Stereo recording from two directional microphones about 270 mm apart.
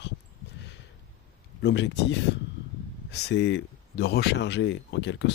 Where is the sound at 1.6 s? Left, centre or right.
Left.